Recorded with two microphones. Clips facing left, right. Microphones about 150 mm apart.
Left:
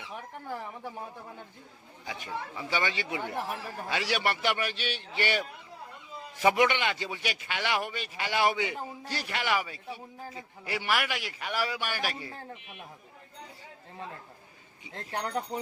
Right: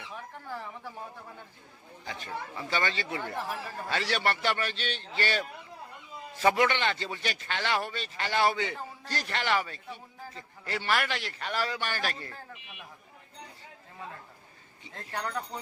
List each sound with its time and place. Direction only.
0.1 s speech: 15° left (ahead or behind)
2.0 s a man's voice: 15° left (ahead or behind)
14.8 s speech: 20° left (ahead or behind)